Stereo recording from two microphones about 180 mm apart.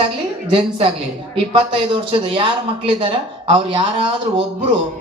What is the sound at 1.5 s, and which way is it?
Speech, 25° right (ahead or behind).